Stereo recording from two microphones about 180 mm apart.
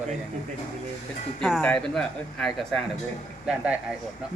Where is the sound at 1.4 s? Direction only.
Centre (ahead or behind).